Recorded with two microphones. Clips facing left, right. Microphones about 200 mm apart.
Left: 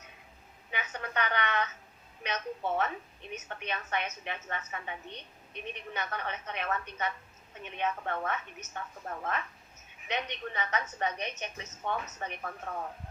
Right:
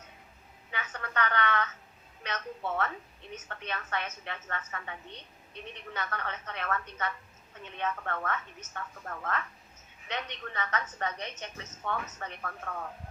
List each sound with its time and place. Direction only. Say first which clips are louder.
0.7 s a woman's voice: left 1 dB; 15° left (ahead or behind)